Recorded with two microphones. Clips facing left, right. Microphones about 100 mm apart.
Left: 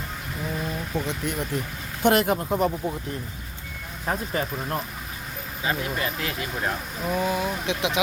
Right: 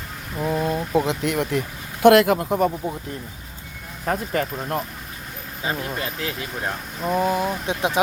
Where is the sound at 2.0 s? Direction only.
85° right.